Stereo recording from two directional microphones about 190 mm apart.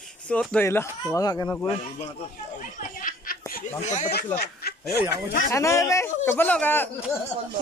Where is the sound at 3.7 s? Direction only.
40° left (ahead or behind).